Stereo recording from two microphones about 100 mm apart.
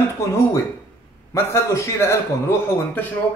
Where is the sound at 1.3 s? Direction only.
25° left (ahead or behind).